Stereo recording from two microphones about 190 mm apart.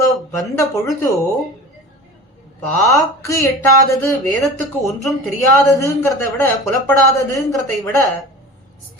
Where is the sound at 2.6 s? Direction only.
10° left (ahead or behind).